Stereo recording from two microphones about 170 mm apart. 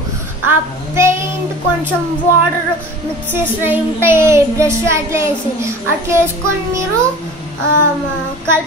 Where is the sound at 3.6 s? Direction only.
10° right (ahead or behind).